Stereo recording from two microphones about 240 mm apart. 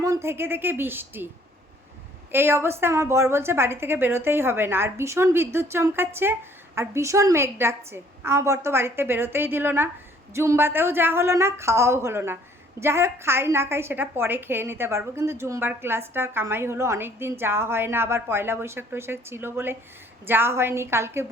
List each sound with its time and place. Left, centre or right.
0.0 s a woman's voice: centre
2.3 s a woman's voice: centre